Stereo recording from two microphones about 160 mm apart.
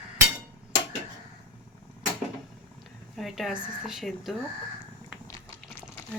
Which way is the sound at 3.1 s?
Centre (ahead or behind).